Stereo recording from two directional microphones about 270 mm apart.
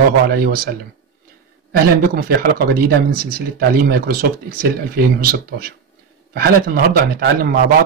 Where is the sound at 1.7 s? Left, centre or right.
Right.